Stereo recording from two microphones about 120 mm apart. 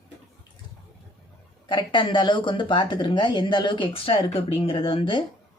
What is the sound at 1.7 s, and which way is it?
Speech, 40° left (ahead or behind).